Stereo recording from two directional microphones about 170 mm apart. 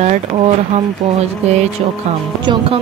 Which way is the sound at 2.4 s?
30° right (ahead or behind).